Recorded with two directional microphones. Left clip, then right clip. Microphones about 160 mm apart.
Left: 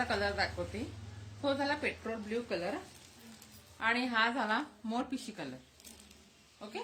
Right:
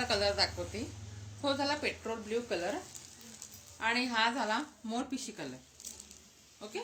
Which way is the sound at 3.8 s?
15° left (ahead or behind).